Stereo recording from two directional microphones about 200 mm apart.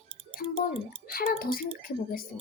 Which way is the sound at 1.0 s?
50° left (ahead or behind).